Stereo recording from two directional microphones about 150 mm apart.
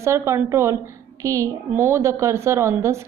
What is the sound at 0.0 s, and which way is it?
Speech, 20° right (ahead or behind).